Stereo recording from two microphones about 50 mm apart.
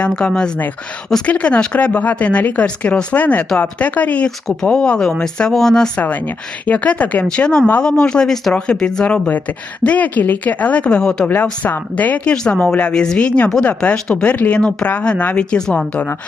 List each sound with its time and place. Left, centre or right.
0.2 s a woman's voice: centre; by 4.3 s left
4.6 s speech: centre
6.0 s speech: left
7.3 s a woman's voice: centre
10.8 s speech: centre
11.6 s a woman's voice: left
12.3 s speech: centre
13.9 s speech: centre
14.3 s a woman's voice: left
15.4 s speech: centre
15.9 s a woman's voice: left